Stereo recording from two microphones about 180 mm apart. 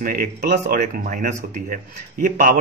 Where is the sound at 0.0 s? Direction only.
50° right (ahead or behind).